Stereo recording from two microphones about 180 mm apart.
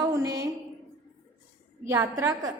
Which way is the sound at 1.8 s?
20° right (ahead or behind).